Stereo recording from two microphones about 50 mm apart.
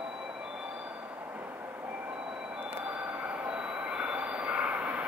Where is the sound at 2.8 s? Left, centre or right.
Right.